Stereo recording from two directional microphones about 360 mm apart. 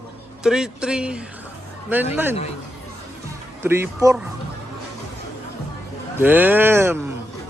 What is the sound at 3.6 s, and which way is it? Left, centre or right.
Speech, centre.